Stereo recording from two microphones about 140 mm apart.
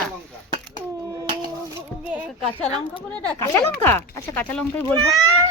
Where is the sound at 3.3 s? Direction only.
20° left (ahead or behind).